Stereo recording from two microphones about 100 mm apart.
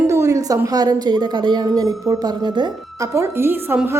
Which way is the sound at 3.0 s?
30° right (ahead or behind).